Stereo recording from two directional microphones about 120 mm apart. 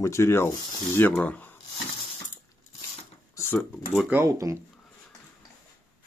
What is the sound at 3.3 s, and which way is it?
Speech, 20° left (ahead or behind).